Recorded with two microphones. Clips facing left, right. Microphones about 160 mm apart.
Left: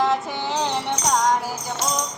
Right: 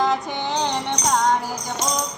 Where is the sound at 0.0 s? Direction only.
5° left (ahead or behind).